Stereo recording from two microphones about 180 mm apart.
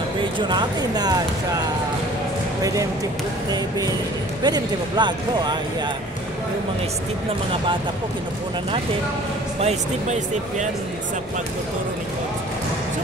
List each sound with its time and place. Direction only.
0.5 s speech: 25° right (ahead or behind)
2.6 s speech: 20° right (ahead or behind)
9.6 s speech: 40° right (ahead or behind)